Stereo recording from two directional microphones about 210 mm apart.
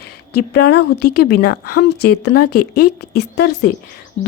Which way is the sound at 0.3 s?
50° left (ahead or behind).